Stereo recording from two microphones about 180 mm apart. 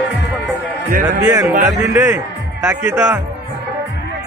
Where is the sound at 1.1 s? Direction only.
20° right (ahead or behind).